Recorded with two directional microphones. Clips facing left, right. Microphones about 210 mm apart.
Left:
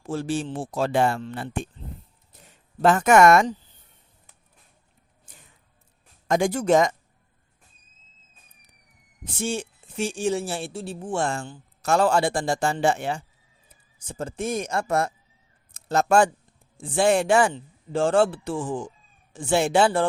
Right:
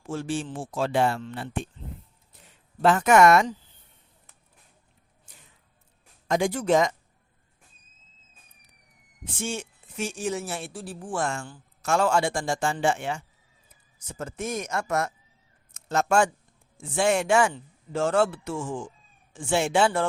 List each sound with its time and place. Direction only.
0.0 s a man's voice: 35° left (ahead or behind)
6.2 s speech: 50° left (ahead or behind)
9.2 s a man's voice: 35° left (ahead or behind)